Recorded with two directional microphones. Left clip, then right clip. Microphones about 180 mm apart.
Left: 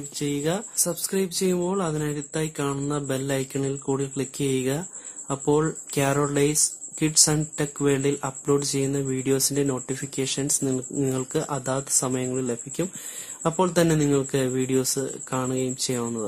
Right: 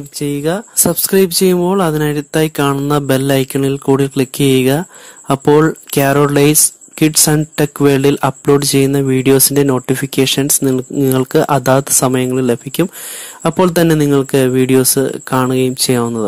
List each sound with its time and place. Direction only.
0.2 s speech: 35° right (ahead or behind)
1.0 s speech: 50° right (ahead or behind)